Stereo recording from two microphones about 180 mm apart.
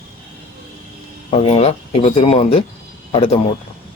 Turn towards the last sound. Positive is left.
turn(degrees=30)  # may be behind; listen again after turning